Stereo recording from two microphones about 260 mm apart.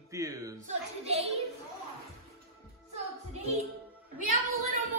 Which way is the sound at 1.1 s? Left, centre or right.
Right.